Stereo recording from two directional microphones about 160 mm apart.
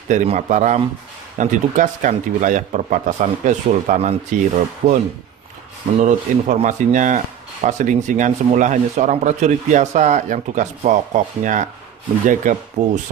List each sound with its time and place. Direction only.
0.1 s speech: 50° right (ahead or behind)
6.0 s speech: 45° right (ahead or behind)